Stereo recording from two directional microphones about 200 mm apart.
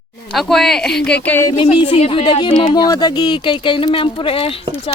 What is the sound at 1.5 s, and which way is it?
Speech, 25° left (ahead or behind).